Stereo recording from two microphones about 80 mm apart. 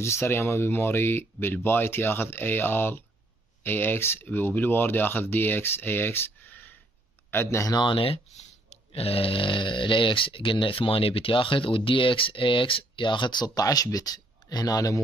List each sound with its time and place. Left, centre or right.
0.0 s speech: left
7.7 s speech: left
9.3 s speech: left